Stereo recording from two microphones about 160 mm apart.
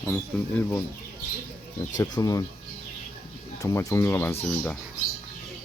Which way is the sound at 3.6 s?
20° left (ahead or behind).